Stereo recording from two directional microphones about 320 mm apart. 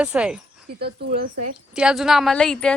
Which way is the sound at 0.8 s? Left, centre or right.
Right.